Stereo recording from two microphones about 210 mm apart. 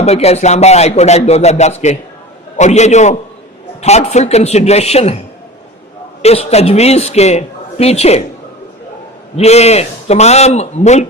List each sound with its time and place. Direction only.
0.0 s a man's voice: 30° left (ahead or behind)
6.2 s a man's voice: 30° left (ahead or behind)
9.3 s a man's voice: 30° left (ahead or behind)